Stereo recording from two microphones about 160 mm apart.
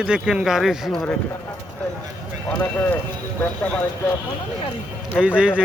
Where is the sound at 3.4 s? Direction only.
10° left (ahead or behind).